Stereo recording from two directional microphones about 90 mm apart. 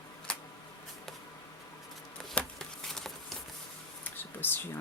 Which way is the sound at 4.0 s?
20° left (ahead or behind).